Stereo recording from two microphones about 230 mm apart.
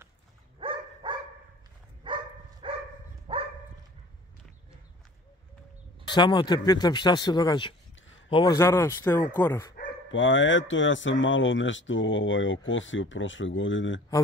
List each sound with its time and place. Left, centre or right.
0.6 s dog: right
6.0 s speech: centre
10.0 s speech: left